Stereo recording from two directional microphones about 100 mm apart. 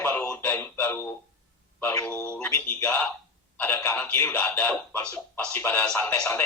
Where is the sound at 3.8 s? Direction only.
20° left (ahead or behind).